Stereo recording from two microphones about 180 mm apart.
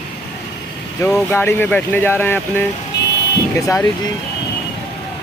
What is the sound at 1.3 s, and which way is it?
Speech, 10° left (ahead or behind).